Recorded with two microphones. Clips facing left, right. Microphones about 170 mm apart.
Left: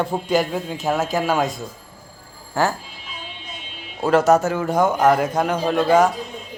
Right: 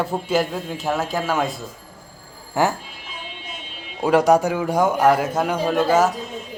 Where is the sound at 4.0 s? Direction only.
15° right (ahead or behind).